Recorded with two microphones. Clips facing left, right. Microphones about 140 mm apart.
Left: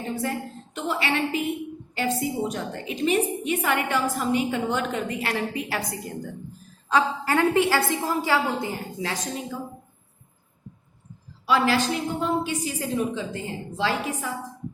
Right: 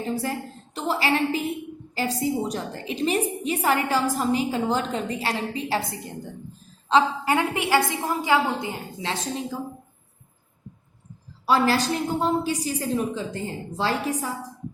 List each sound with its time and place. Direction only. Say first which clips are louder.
0.2 s a woman's voice: even; 35° right (ahead or behind)
11.4 s a woman's voice: right 1 dB; 40° right (ahead or behind)